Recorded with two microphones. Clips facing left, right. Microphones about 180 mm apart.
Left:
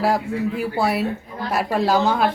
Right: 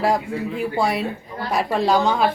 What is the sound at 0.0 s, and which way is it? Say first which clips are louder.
A woman's voice: left 1 dB; 5° left (ahead or behind).